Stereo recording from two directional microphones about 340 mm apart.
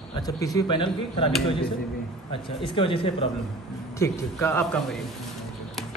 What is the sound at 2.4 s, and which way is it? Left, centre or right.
A man's voice, centre.